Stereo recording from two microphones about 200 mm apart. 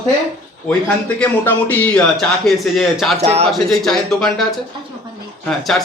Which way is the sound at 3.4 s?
Centre (ahead or behind).